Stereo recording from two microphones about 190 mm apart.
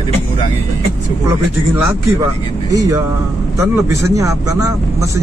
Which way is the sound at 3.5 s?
15° right (ahead or behind).